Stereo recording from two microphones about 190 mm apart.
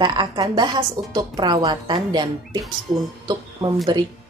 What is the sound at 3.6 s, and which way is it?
Speech, 10° right (ahead or behind).